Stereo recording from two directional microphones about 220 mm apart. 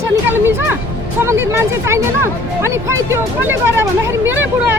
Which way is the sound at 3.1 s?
10° right (ahead or behind).